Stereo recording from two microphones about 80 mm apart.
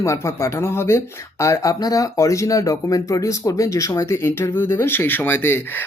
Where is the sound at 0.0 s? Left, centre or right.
Left.